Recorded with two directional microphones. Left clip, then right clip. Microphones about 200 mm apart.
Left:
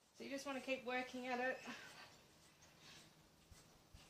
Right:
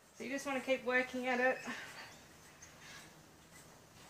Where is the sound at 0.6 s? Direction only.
15° left (ahead or behind).